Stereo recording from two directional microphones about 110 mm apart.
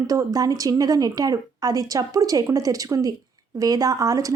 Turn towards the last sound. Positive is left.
turn(degrees=-30)  # may be behind; listen again after turning